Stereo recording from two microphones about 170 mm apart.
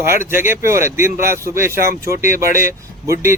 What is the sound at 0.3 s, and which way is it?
Speech, 15° right (ahead or behind).